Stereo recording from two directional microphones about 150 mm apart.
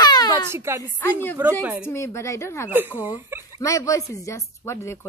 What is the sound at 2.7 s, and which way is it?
Speech, 10° right (ahead or behind).